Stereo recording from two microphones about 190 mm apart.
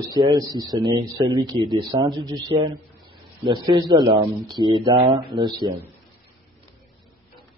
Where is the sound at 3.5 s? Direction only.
25° right (ahead or behind).